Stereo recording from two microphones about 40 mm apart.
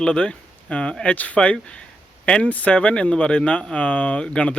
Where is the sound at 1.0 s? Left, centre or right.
Left.